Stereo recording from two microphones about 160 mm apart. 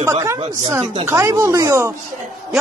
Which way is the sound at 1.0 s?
20° right (ahead or behind).